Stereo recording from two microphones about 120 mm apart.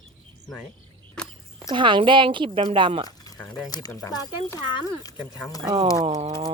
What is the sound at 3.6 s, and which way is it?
Speech, 30° left (ahead or behind).